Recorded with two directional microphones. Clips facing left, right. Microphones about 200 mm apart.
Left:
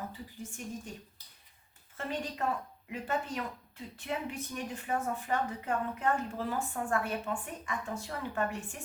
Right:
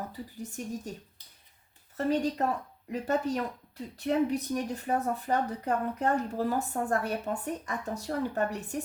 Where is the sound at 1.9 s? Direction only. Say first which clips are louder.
Right 9 dB; 40° right (ahead or behind).